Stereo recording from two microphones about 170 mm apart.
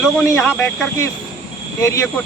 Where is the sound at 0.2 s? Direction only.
10° left (ahead or behind).